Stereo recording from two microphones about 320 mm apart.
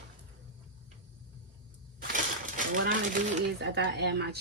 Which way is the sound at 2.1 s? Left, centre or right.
Right.